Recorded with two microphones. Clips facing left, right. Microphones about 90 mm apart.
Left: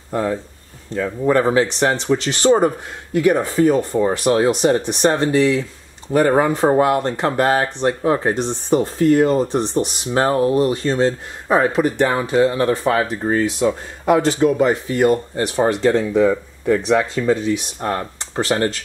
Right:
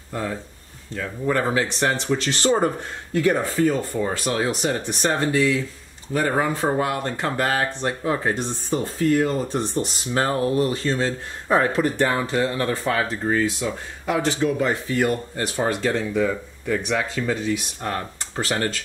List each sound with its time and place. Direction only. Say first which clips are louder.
0.9 s speech: left 7 dB; 35° left (ahead or behind)
1.4 s speech: left 6 dB; 20° left (ahead or behind)
13.6 s speech: left 8 dB; 35° left (ahead or behind); by 18.8 s 20° left (ahead or behind)